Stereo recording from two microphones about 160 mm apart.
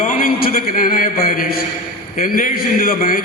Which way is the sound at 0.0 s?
60° left (ahead or behind).